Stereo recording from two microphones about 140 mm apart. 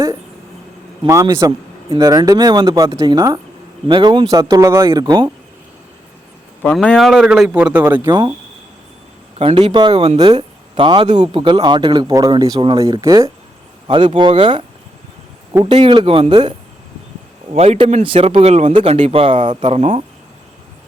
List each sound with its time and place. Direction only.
1.0 s a man's voice: 20° right (ahead or behind)
6.7 s speech: 5° left (ahead or behind)
9.4 s a man's voice: 40° right (ahead or behind); by 13.3 s 25° right (ahead or behind)
13.8 s a man's voice: 40° right (ahead or behind)
15.7 s a man's voice: 35° right (ahead or behind)
17.6 s speech: 50° right (ahead or behind)